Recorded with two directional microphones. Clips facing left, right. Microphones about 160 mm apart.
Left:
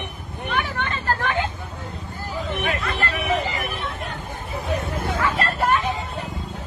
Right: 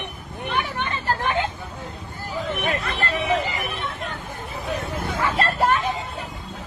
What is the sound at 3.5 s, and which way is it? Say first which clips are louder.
Speech: left 1 dB; centre (ahead or behind).